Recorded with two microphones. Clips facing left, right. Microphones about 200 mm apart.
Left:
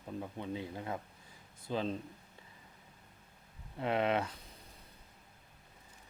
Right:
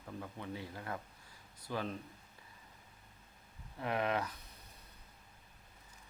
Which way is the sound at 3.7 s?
20° left (ahead or behind).